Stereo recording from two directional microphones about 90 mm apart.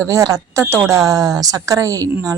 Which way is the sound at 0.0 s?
35° right (ahead or behind).